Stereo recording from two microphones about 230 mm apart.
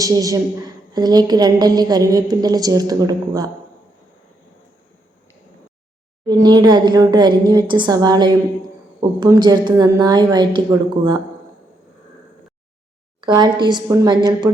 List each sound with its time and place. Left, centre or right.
0.0 s a woman's voice: centre
6.2 s a woman's voice: centre
13.2 s a woman's voice: centre